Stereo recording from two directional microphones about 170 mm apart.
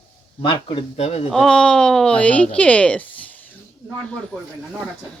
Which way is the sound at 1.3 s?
5° left (ahead or behind).